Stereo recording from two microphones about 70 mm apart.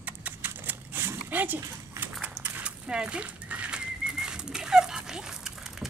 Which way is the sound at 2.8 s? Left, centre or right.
Centre.